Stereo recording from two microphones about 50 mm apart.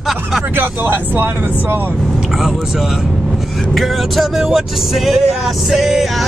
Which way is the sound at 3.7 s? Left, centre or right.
Centre.